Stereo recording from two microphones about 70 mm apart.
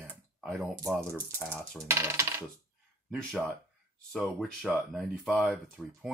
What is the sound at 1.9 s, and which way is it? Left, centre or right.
Coin, right.